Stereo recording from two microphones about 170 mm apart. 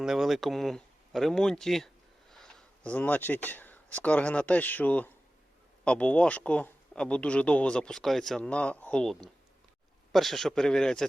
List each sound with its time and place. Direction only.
0.0 s speech: centre (ahead or behind)